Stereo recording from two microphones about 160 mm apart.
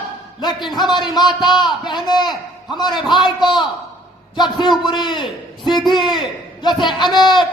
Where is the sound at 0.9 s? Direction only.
25° left (ahead or behind).